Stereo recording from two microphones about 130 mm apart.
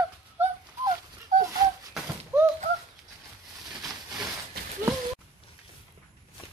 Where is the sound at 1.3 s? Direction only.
75° right (ahead or behind).